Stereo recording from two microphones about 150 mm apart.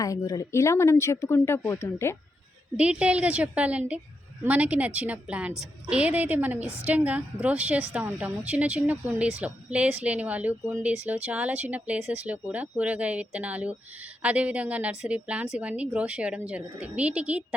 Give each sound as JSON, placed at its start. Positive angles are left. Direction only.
{"t": 0.0, "sound": "speech", "side_deg": 20}
{"t": 2.7, "sound": "a woman's voice", "side_deg": -5}